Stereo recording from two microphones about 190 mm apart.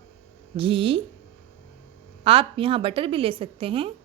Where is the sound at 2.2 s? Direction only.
30° right (ahead or behind).